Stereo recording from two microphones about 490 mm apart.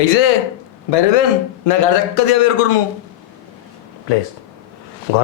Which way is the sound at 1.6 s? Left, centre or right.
Left.